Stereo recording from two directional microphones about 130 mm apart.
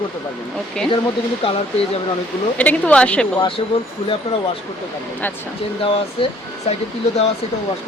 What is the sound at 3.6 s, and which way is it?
Speech, 40° left (ahead or behind).